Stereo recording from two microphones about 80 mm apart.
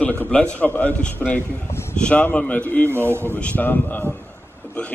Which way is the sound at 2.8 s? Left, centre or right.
Right.